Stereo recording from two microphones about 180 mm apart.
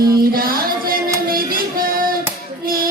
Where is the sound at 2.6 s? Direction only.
55° right (ahead or behind).